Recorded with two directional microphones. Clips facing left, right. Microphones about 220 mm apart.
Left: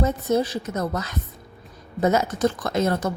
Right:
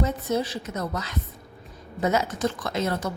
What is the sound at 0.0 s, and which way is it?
A woman's voice, 45° left (ahead or behind).